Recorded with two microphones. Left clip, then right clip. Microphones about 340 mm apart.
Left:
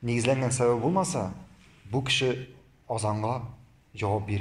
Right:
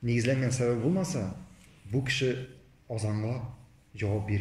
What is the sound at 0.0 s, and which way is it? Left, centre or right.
Speech, centre.